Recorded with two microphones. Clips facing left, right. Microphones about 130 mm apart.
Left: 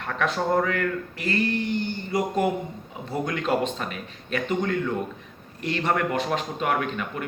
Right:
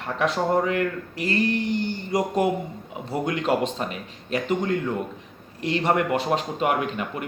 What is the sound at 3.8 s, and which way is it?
Speech, 20° right (ahead or behind).